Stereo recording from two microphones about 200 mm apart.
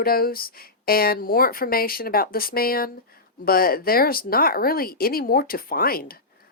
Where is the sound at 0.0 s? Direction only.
50° left (ahead or behind).